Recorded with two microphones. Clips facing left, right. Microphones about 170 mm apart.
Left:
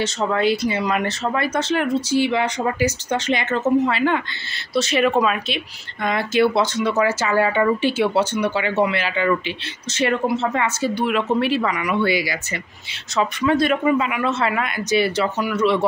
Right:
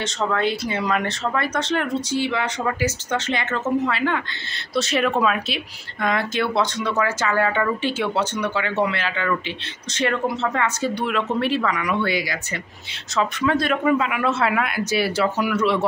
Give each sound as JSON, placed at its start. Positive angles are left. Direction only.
{"t": 0.0, "sound": "speech", "side_deg": 5}
{"t": 4.7, "sound": "speech", "side_deg": 0}